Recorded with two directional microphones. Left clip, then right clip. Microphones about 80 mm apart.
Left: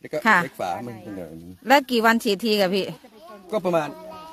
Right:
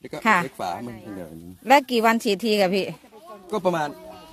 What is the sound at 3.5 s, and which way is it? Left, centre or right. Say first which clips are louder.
Speech: left 1 dB; left.